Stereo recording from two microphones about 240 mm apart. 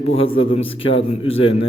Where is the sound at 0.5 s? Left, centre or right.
Left.